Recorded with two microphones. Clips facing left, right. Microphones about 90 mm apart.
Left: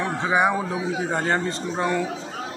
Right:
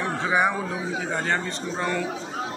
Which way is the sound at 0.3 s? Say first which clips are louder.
Left 2 dB; 5° left (ahead or behind).